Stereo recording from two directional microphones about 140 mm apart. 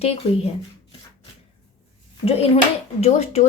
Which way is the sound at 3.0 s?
50° left (ahead or behind).